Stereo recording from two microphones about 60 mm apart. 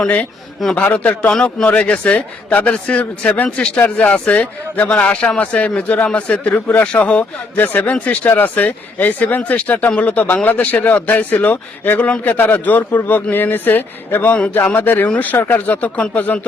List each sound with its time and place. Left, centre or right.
0.8 s a man's voice: left
1.3 s a man's voice: centre
7.5 s a man's voice: left